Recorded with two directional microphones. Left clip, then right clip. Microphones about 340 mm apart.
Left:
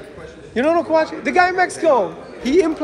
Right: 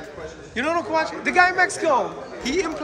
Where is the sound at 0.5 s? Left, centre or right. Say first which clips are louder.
Left 6 dB; centre.